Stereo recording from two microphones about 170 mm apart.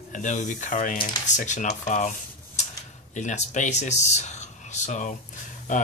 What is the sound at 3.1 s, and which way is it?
Speech, 45° left (ahead or behind).